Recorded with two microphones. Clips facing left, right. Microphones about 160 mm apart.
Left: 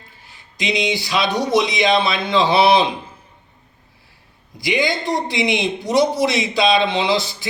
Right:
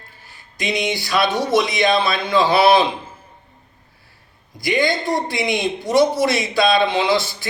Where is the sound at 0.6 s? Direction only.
20° left (ahead or behind).